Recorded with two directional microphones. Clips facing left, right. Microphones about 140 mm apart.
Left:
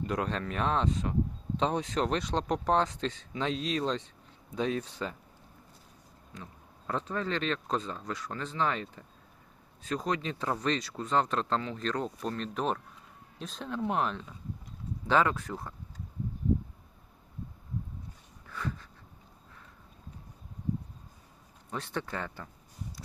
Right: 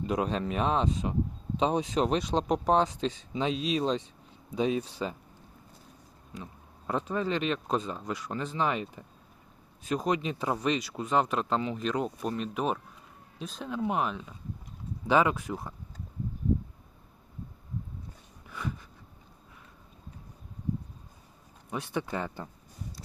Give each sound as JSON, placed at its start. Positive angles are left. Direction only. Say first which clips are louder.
{"t": 0.0, "sound": "speech", "louder": "right 3 dB", "side_deg": -20}
{"t": 6.3, "sound": "speech", "louder": "right 4 dB", "side_deg": -15}
{"t": 18.4, "sound": "a sound", "louder": "even", "side_deg": -15}
{"t": 21.7, "sound": "speech", "louder": "right 3 dB", "side_deg": -10}